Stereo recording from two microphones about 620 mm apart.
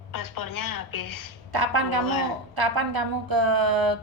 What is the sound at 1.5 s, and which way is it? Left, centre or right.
A woman's voice, right.